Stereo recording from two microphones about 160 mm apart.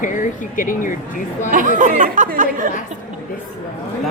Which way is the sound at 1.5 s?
50° right (ahead or behind).